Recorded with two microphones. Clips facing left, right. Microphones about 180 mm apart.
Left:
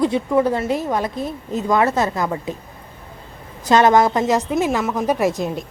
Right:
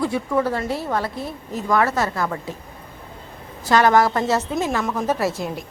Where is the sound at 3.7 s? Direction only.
20° left (ahead or behind).